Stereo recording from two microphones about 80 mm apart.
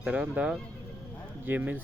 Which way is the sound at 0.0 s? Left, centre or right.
Centre.